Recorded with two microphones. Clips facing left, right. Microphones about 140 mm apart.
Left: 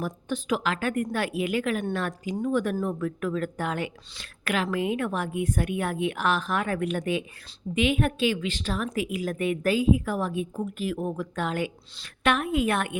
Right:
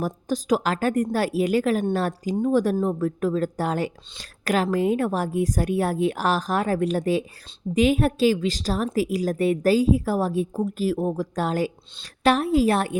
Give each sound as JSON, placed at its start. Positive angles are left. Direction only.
{"t": 0.0, "sound": "a woman's voice", "side_deg": -35}